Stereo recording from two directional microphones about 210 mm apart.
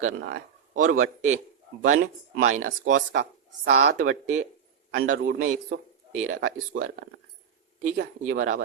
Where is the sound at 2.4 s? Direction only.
35° right (ahead or behind).